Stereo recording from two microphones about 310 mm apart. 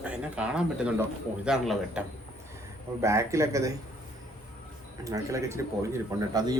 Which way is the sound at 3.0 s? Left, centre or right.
Centre.